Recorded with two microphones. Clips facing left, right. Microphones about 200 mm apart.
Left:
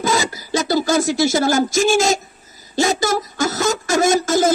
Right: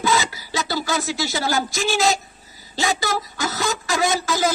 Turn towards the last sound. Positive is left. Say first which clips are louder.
# left 6 dB
turn(degrees=45)  # may be behind; listen again after turning